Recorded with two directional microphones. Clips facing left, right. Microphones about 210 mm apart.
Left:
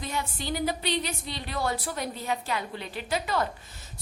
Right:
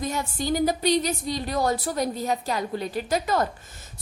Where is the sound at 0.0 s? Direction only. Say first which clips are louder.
Right 5 dB; 45° right (ahead or behind).